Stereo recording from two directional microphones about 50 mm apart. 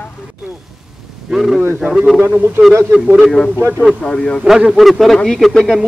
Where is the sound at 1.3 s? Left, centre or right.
Centre.